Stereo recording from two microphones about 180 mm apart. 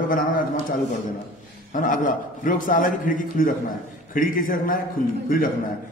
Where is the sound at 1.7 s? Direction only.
45° left (ahead or behind).